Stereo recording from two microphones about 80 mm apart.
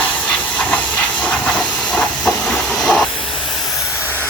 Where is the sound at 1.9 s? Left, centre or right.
Centre.